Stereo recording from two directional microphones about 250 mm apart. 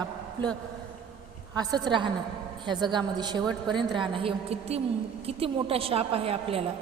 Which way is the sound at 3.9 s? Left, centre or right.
Centre.